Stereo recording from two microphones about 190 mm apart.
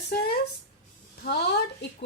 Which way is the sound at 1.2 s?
60° left (ahead or behind).